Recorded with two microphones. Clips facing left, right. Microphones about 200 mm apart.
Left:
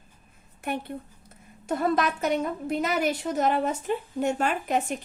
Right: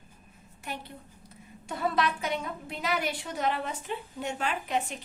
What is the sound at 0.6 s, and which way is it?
A woman's voice, 55° left (ahead or behind).